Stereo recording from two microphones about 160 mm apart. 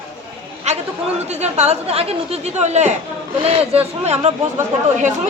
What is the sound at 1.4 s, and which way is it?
Speech, 45° right (ahead or behind).